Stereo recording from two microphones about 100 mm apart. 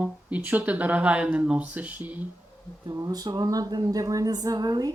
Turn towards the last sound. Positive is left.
turn(degrees=-40)  # may be behind; listen again after turning